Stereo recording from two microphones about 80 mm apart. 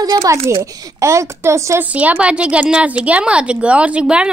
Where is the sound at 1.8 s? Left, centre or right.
Centre.